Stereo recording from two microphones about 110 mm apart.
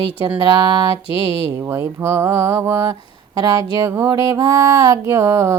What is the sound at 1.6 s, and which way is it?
Speech, 25° right (ahead or behind).